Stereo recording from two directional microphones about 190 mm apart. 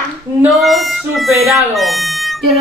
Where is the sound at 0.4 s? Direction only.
Centre (ahead or behind).